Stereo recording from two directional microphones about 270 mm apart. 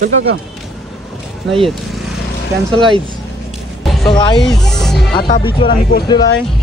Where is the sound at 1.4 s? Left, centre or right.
Centre.